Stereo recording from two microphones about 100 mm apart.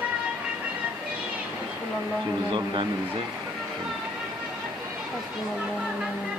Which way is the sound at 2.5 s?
55° right (ahead or behind).